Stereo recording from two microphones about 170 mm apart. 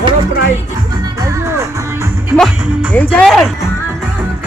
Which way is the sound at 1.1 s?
15° right (ahead or behind).